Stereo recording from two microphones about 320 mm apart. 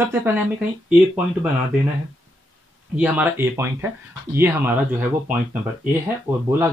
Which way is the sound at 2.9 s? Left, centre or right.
Centre.